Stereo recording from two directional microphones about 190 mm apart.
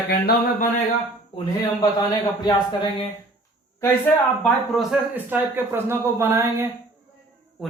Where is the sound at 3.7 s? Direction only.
15° left (ahead or behind).